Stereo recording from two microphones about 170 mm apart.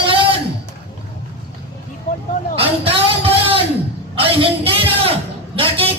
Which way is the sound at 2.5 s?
35° right (ahead or behind).